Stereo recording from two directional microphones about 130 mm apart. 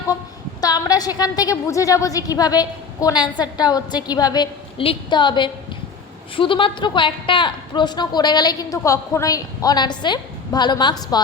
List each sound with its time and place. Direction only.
0.6 s a woman's voice: 30° left (ahead or behind)
4.8 s a woman's voice: 40° left (ahead or behind)